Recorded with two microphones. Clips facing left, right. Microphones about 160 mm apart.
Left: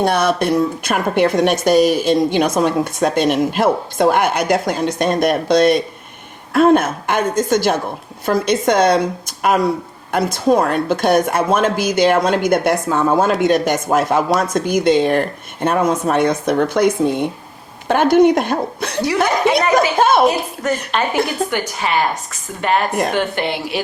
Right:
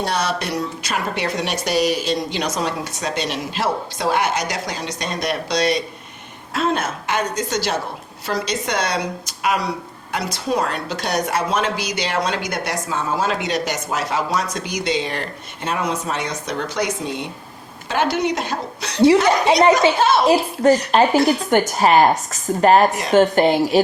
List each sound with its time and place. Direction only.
0.0 s a woman's voice: 55° left (ahead or behind)
20.2 s a woman's voice: 30° right (ahead or behind)
21.5 s a woman's voice: 45° right (ahead or behind)